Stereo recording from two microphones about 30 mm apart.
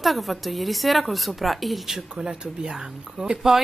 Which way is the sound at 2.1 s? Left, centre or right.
Right.